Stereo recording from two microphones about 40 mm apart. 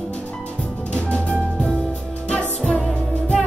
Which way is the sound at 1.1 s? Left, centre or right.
Left.